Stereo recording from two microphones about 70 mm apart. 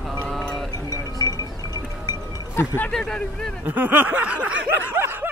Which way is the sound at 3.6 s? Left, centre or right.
Right.